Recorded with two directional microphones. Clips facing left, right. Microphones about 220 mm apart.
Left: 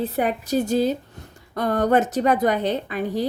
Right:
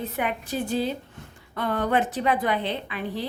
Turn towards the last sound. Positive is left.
turn(degrees=45)  # may be behind; listen again after turning